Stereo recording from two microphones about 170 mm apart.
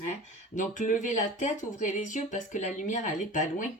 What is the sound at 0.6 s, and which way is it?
Speech, 50° left (ahead or behind).